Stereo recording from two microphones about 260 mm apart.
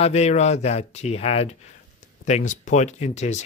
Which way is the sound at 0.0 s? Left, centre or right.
Left.